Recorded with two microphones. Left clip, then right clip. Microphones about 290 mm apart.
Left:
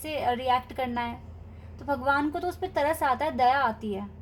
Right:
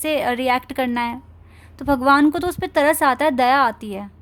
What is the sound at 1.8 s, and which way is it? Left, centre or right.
A woman's voice, right.